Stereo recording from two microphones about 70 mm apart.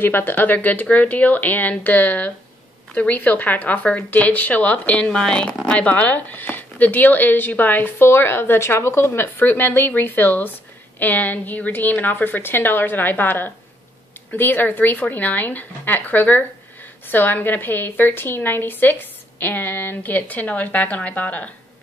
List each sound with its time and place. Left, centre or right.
0.0 s speech: left